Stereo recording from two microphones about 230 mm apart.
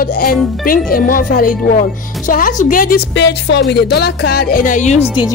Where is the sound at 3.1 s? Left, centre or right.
Left.